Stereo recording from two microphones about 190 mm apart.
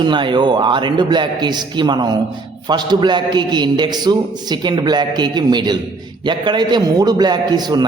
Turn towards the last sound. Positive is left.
turn(degrees=-20)  # may be behind; listen again after turning